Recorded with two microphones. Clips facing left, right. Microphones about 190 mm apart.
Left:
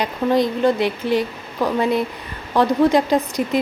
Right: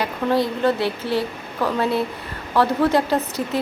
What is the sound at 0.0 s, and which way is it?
Speech, 15° left (ahead or behind).